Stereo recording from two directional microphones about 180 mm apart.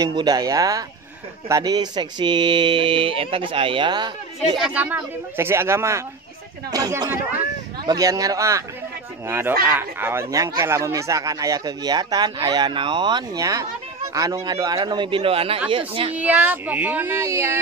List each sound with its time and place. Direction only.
0.0 s speech: 20° right (ahead or behind)
4.6 s speech: 5° right (ahead or behind); by 16.2 s 30° right (ahead or behind)
16.2 s speech: 10° right (ahead or behind)